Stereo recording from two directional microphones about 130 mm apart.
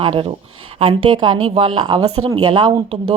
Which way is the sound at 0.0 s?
45° right (ahead or behind).